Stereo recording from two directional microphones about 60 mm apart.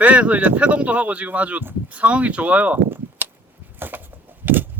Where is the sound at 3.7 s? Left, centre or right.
Right.